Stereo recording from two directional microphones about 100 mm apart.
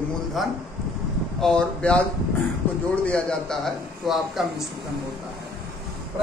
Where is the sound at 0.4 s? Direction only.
Centre (ahead or behind).